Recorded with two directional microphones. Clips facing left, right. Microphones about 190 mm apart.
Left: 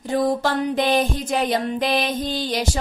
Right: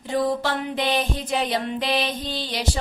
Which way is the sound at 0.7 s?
45° left (ahead or behind).